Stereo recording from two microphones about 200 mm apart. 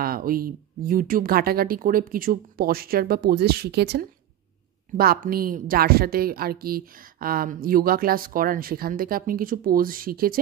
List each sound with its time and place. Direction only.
0.0 s a woman's voice: 45° right (ahead or behind)